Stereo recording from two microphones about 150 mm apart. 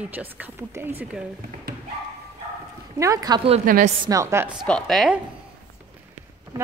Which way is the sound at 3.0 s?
25° right (ahead or behind).